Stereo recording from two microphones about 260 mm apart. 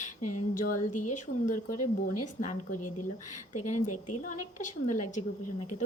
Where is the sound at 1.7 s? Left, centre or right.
Left.